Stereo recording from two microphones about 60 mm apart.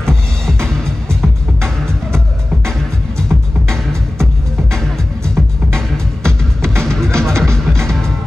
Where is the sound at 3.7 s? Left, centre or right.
Centre.